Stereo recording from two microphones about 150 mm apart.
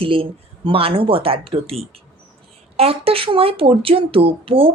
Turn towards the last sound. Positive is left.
turn(degrees=-40)  # may be behind; listen again after turning